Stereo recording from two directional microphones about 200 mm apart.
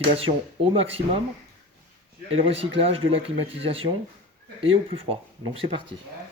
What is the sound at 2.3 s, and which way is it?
Speech, 30° right (ahead or behind).